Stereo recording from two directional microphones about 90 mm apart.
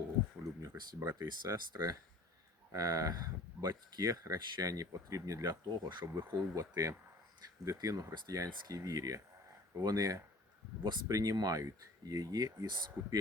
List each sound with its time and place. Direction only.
0.6 s speech: 40° right (ahead or behind); by 6.1 s 55° right (ahead or behind)
6.1 s speech: 25° right (ahead or behind)
6.5 s speech: 40° right (ahead or behind)